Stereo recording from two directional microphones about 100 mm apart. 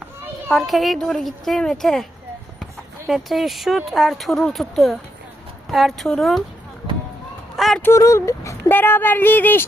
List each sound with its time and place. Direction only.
0.5 s speech: centre (ahead or behind)
3.1 s speech: centre (ahead or behind)
7.5 s a sound: centre (ahead or behind)
7.8 s speech: 25° left (ahead or behind)
8.7 s speech: 20° left (ahead or behind)